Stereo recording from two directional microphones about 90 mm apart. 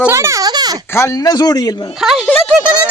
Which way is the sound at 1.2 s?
45° left (ahead or behind).